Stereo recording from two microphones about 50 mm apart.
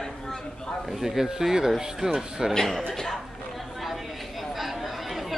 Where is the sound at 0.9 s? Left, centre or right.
Centre.